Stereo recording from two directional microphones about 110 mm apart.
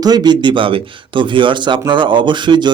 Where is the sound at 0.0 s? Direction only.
40° right (ahead or behind).